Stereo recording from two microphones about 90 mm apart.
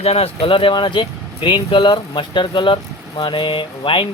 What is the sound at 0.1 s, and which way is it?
Speech, 90° left.